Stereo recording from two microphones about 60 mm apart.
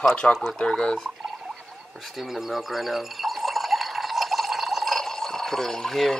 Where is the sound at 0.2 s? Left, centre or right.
Centre.